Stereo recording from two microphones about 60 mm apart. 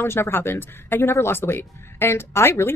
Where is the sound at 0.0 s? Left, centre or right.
Left.